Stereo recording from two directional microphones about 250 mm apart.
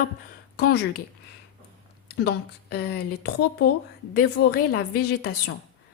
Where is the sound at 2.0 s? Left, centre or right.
Left.